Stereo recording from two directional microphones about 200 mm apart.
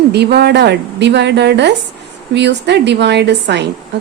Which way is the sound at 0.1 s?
55° right (ahead or behind).